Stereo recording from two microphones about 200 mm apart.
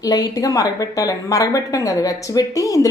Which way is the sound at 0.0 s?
20° left (ahead or behind).